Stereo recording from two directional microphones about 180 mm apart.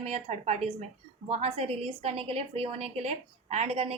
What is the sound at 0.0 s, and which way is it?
A woman's voice, 35° right (ahead or behind).